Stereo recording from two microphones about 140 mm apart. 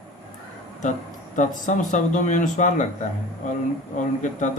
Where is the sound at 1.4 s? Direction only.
65° left (ahead or behind).